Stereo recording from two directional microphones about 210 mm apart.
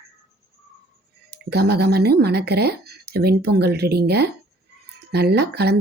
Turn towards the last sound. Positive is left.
turn(degrees=-50)  # may be behind; listen again after turning